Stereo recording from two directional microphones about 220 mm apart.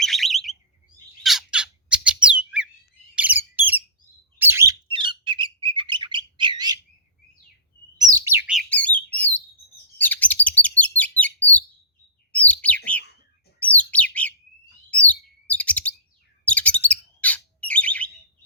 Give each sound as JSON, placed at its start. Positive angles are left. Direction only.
{"t": 0.0, "sound": "bird", "side_deg": 0}
{"t": 7.9, "sound": "bird", "side_deg": -15}
{"t": 8.7, "sound": "bird", "side_deg": 5}
{"t": 10.0, "sound": "chirp", "side_deg": 5}
{"t": 12.3, "sound": "bird", "side_deg": 5}
{"t": 14.8, "sound": "chirp", "side_deg": 5}
{"t": 16.5, "sound": "bird", "side_deg": 5}